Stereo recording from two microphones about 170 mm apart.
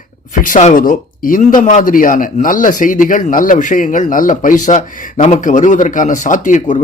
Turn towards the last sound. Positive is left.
turn(degrees=45)  # may be behind; listen again after turning